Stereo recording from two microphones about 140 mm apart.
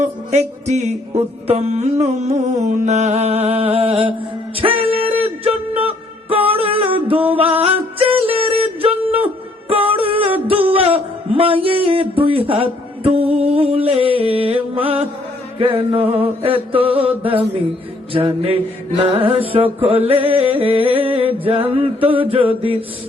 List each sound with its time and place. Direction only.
0.0 s music: 50° right (ahead or behind)
9.6 s a sound: 40° right (ahead or behind)
15.5 s music: 40° right (ahead or behind)